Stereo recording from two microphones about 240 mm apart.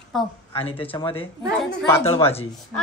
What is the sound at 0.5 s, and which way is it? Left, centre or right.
Speech, left.